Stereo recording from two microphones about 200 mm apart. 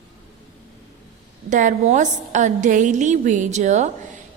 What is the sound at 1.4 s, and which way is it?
A woman's voice, 40° right (ahead or behind).